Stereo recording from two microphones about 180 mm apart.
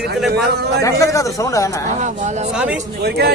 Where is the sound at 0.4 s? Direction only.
65° right (ahead or behind).